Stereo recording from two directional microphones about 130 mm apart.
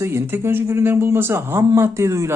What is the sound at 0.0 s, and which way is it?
Speech, 20° right (ahead or behind).